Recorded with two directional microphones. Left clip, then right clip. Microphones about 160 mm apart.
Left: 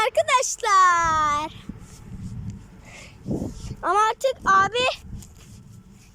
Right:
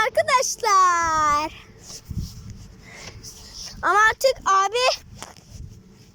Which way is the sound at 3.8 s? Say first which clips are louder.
Right 3 dB; 15° left (ahead or behind).